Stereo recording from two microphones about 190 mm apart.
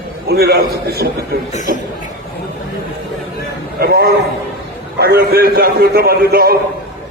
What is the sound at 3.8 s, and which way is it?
A man's voice, 55° right (ahead or behind).